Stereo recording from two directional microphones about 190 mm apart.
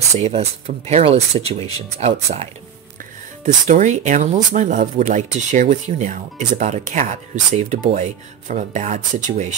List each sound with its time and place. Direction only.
0.2 s speech: 35° right (ahead or behind)
3.6 s speech: 40° right (ahead or behind)